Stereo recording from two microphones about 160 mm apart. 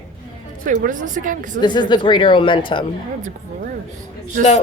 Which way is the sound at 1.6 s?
30° left (ahead or behind).